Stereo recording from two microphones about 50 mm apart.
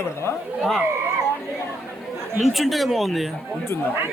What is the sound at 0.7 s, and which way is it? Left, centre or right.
Run, centre.